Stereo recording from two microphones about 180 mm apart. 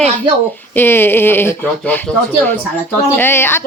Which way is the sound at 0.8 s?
10° left (ahead or behind).